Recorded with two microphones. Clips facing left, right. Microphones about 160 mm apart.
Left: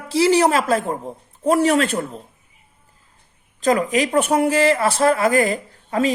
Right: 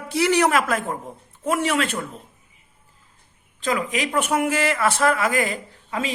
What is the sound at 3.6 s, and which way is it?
A woman's voice, 40° left (ahead or behind).